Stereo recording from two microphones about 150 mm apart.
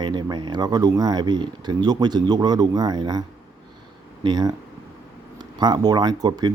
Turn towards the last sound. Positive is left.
turn(degrees=-25)  # may be behind; listen again after turning